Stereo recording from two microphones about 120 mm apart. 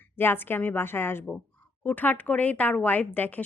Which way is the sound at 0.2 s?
20° left (ahead or behind).